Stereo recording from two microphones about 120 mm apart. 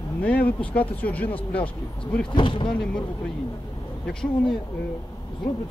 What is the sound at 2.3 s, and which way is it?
Speech, 45° left (ahead or behind).